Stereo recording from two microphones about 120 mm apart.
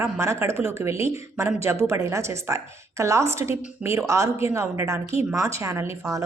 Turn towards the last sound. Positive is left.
turn(degrees=-25)  # may be behind; listen again after turning